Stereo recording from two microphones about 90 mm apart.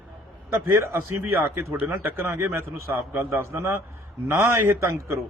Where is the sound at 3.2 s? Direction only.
30° right (ahead or behind).